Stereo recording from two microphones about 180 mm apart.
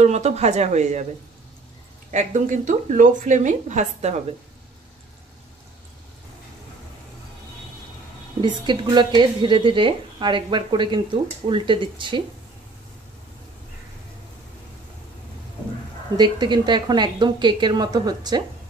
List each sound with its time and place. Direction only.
0.0 s speech: 40° right (ahead or behind)
2.0 s a woman's voice: 40° right (ahead or behind)
8.4 s speech: 25° right (ahead or behind)
16.2 s speech: 25° right (ahead or behind)